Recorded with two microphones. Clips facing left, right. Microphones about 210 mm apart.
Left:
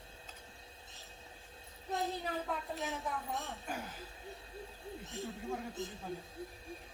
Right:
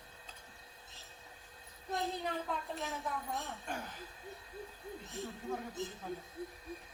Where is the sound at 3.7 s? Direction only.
5° left (ahead or behind).